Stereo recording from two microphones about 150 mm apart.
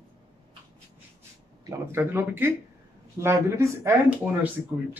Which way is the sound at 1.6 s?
15° right (ahead or behind).